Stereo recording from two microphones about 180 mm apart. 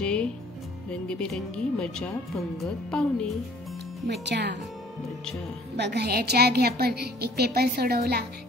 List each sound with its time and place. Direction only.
0.0 s music: 5° left (ahead or behind)
1.0 s speech: 5° left (ahead or behind)
4.1 s speech: 70° right (ahead or behind)
5.8 s a woman's voice: 70° right (ahead or behind)